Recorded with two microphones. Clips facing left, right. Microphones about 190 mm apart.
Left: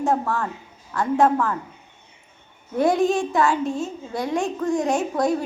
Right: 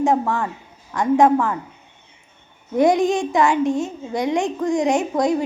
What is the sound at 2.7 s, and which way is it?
A woman's voice, 15° right (ahead or behind).